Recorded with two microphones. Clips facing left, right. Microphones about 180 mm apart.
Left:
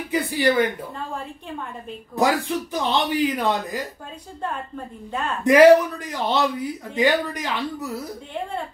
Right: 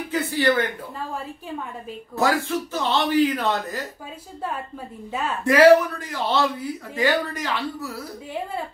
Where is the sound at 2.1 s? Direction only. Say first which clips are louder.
Left 1 dB; 15° left (ahead or behind).